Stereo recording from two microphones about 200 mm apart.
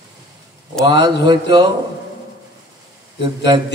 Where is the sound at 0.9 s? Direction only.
60° left (ahead or behind).